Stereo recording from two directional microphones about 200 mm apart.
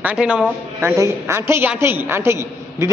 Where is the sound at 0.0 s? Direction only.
5° right (ahead or behind).